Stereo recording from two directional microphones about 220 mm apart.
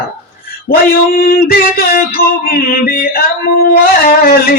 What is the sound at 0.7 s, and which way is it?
Mantra, 45° left (ahead or behind).